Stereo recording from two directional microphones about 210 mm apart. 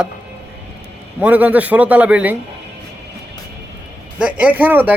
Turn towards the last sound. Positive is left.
turn(degrees=-10)  # may be behind; listen again after turning